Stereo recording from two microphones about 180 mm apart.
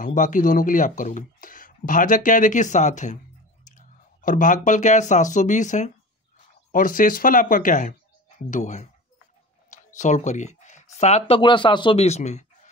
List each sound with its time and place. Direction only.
0.0 s speech: 45° left (ahead or behind)